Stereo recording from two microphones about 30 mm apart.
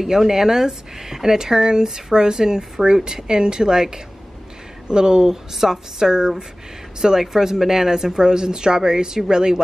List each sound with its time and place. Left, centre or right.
0.0 s speech: centre
5.2 s speech: centre